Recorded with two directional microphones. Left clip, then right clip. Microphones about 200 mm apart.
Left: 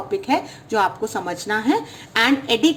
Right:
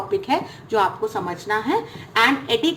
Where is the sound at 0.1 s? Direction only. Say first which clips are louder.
Left 1 dB; 25° left (ahead or behind).